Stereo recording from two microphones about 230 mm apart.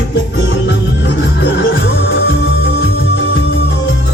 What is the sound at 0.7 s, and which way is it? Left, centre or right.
Music, left.